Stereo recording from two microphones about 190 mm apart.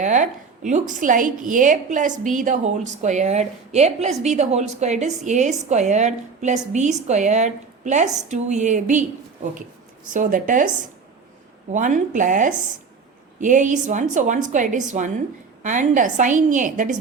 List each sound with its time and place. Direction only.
0.0 s a woman's voice: 40° right (ahead or behind)
11.7 s a woman's voice: 40° right (ahead or behind)